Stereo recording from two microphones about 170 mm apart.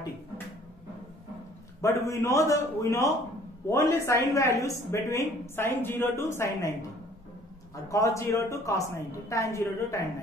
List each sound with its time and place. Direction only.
1.8 s a woman's voice: 20° left (ahead or behind)
7.7 s a woman's voice: 20° left (ahead or behind)